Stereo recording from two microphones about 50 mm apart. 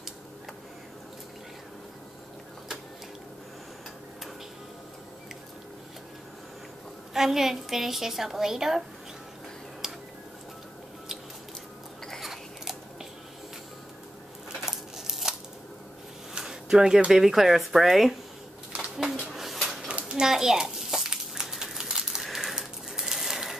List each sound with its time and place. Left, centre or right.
7.2 s a woman's voice: centre
9.8 s tick-tock: centre
12.2 s scissors: centre
14.7 s scissors: centre
16.3 s a sound: centre
17.1 s speech: centre
19.3 s bird: centre
19.9 s a sound: centre